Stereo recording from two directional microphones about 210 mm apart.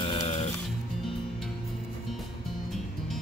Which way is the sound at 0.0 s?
30° left (ahead or behind).